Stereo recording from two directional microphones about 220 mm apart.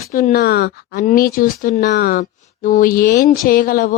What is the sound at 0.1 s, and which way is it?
Speech, 40° left (ahead or behind).